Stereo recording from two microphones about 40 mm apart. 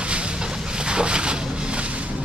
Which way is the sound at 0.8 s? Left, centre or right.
Right.